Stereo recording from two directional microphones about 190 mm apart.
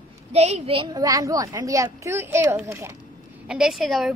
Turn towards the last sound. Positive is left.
turn(degrees=0)  # may be behind; listen again after turning